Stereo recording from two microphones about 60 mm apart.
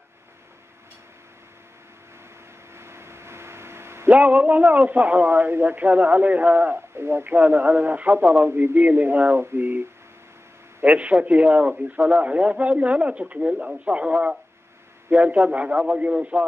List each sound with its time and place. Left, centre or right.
2.7 s a sound: right
4.1 s a man's voice: right
7.0 s speech: right
7.3 s a man's voice: right
8.5 s a man's voice: right
10.8 s a man's voice: right